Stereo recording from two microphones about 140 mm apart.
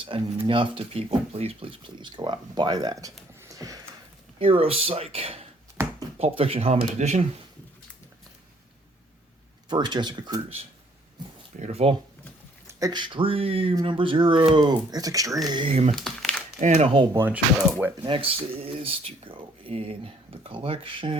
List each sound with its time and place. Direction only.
0.0 s speech: 40° right (ahead or behind)
3.4 s a sound: 25° right (ahead or behind)
4.4 s speech: 40° right (ahead or behind)
5.8 s a sound: 15° right (ahead or behind)
6.1 s speech: 45° right (ahead or behind)
9.6 s speech: 30° right (ahead or behind)
11.6 s speech: 50° right (ahead or behind)
12.6 s speech: 30° right (ahead or behind)
15.4 s speech: 35° right (ahead or behind)
16.0 s crumpling: centre (ahead or behind)
16.6 s speech: 60° right (ahead or behind)
17.2 s speech: 10° right (ahead or behind)
18.0 s speech: 40° right (ahead or behind)